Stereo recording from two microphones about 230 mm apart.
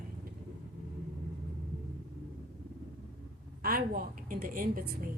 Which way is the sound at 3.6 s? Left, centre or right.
Right.